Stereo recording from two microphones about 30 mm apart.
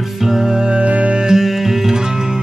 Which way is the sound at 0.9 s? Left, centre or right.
Right.